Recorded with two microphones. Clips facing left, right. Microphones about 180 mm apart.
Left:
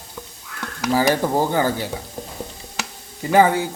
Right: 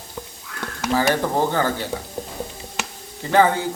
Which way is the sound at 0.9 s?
15° left (ahead or behind).